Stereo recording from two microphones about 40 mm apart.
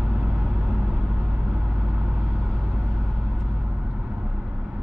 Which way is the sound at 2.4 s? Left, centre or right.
Centre.